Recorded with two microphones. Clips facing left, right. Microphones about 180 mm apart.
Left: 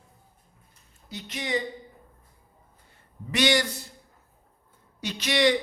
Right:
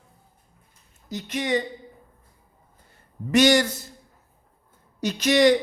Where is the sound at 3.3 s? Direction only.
45° right (ahead or behind).